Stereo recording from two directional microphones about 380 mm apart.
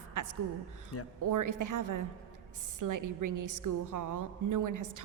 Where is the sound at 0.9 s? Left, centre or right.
Left.